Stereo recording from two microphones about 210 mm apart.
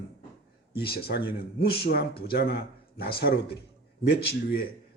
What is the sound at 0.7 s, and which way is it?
Speech, 50° left (ahead or behind).